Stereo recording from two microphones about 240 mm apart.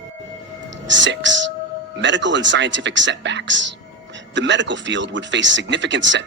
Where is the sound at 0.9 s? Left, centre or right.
Right.